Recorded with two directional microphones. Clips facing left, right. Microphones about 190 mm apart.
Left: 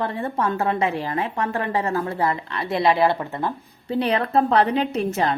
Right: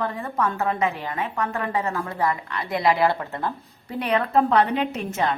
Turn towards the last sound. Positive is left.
turn(degrees=35)  # may be behind; listen again after turning